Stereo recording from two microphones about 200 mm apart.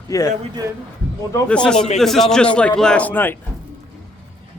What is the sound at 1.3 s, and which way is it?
A man's voice, 5° left (ahead or behind).